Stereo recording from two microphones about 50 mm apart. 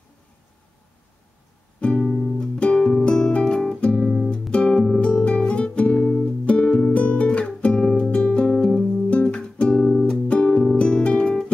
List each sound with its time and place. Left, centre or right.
1.8 s music: left
2.0 s music: centre
2.4 s music: left
4.3 s music: left